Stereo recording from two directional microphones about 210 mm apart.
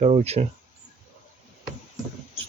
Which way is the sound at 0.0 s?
30° right (ahead or behind).